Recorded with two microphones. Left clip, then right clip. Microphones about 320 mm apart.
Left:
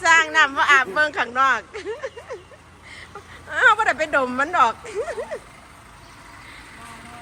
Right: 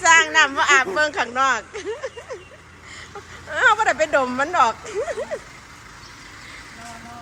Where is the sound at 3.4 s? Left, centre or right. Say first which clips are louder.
Even; centre.